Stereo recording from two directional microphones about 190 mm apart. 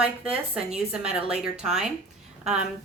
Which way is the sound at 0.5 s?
5° right (ahead or behind).